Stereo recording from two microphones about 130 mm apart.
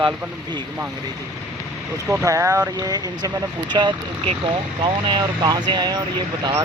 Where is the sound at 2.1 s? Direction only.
25° right (ahead or behind).